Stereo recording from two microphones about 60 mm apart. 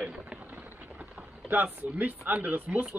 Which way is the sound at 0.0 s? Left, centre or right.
Centre.